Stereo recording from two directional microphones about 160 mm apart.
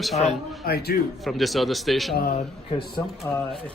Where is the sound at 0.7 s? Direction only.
75° left (ahead or behind).